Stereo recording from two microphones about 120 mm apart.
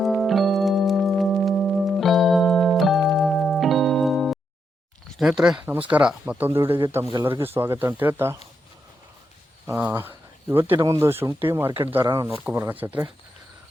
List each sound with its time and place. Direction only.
0.0 s music: centre (ahead or behind)
5.1 s speech: 5° right (ahead or behind)
9.6 s speech: 15° right (ahead or behind)
10.8 s speech: 30° right (ahead or behind)